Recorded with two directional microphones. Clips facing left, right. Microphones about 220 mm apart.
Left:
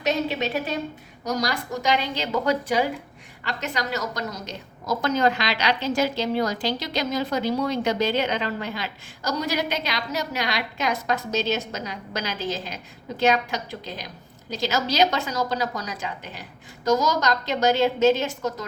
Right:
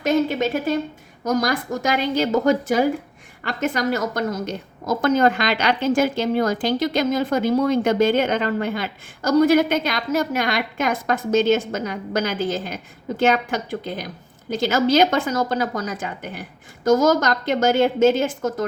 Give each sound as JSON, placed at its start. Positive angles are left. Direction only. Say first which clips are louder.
{"t": 0.0, "sound": "a woman's voice", "louder": "right 5 dB", "side_deg": -50}